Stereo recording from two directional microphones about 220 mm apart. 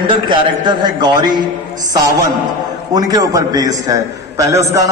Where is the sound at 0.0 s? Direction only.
20° right (ahead or behind).